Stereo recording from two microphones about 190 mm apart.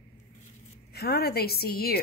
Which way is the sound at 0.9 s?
55° left (ahead or behind).